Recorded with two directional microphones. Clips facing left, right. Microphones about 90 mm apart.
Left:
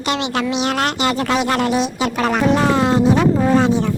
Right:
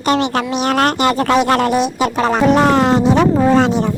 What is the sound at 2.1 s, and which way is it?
Speech, 30° right (ahead or behind).